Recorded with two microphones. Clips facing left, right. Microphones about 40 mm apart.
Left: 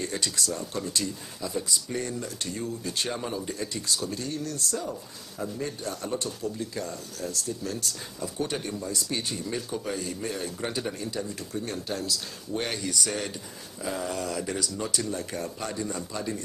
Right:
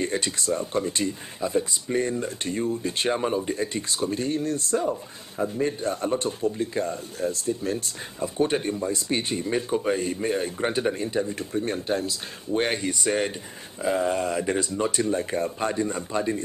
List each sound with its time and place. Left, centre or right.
0.0 s speech: right